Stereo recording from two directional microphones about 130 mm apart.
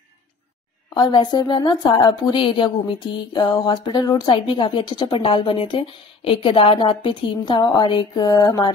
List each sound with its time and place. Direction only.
0.9 s a woman's voice: 35° left (ahead or behind)